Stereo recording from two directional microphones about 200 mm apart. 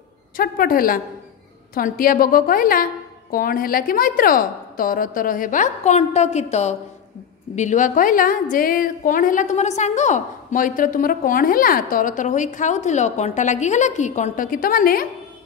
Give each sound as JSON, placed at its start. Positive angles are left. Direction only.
{"t": 0.4, "sound": "a woman's voice", "side_deg": 45}